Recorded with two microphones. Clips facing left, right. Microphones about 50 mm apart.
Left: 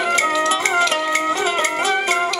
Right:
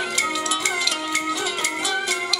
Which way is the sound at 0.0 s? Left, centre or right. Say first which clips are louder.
Left 7 dB; left.